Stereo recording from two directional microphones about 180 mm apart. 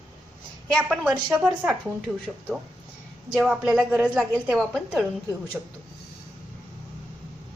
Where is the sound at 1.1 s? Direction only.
20° right (ahead or behind).